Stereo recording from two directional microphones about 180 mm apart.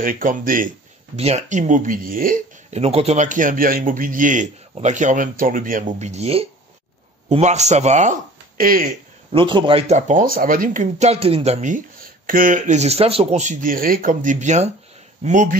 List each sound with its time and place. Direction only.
0.0 s speech: 50° right (ahead or behind)
1.1 s speech: 35° right (ahead or behind)
9.3 s speech: 25° right (ahead or behind); by 15.5 s 45° right (ahead or behind)